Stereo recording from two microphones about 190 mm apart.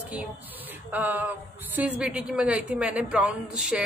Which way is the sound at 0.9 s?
10° right (ahead or behind).